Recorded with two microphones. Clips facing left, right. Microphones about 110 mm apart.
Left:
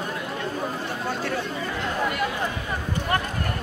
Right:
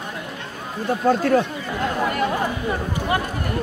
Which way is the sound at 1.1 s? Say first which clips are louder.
Right 12 dB; 45° right (ahead or behind).